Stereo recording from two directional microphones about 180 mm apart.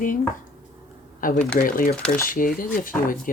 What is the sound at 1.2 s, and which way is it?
Speech, 50° left (ahead or behind).